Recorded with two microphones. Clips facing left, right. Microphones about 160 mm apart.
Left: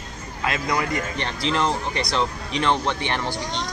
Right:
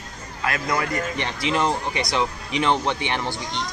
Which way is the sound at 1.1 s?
15° right (ahead or behind).